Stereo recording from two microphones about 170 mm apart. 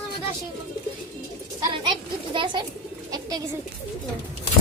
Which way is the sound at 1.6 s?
25° right (ahead or behind).